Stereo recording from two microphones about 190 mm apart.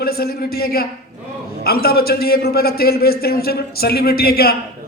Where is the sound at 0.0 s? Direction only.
55° left (ahead or behind).